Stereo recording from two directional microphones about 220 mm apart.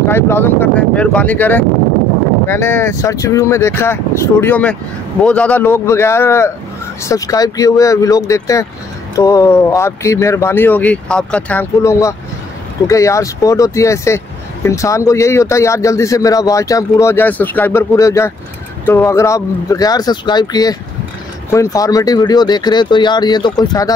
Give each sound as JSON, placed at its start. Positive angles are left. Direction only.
{"t": 0.1, "sound": "speech", "side_deg": 10}